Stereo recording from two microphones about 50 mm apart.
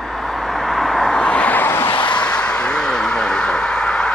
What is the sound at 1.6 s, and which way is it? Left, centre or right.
Vehicle, left.